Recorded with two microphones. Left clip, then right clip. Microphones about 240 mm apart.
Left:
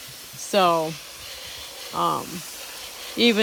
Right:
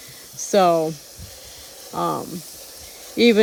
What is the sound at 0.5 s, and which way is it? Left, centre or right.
Speech, right.